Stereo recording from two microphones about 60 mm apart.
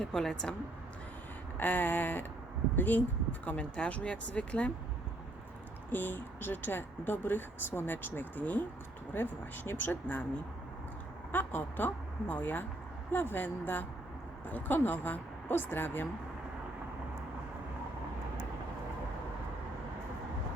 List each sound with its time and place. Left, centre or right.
0.0 s speech: centre
1.5 s speech: left
5.9 s speech: left
11.3 s speech: left